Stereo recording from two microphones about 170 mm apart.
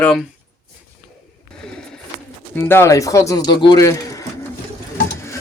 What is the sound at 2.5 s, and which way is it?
Speech, 15° left (ahead or behind).